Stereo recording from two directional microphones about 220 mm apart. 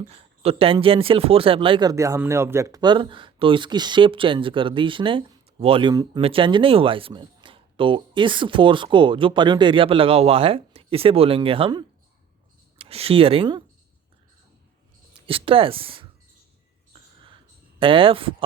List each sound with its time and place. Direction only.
0.0 s speech: 25° right (ahead or behind)
15.3 s speech: 25° right (ahead or behind)
17.7 s speech: 25° right (ahead or behind)